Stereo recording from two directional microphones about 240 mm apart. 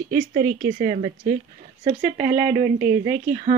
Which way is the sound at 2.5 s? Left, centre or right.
Centre.